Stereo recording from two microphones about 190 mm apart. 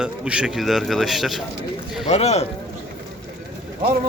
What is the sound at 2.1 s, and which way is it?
Speech, 35° left (ahead or behind).